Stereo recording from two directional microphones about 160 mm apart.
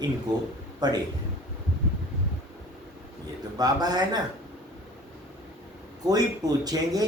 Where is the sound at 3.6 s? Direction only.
25° right (ahead or behind).